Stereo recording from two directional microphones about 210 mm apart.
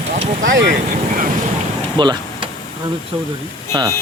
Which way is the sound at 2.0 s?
20° right (ahead or behind).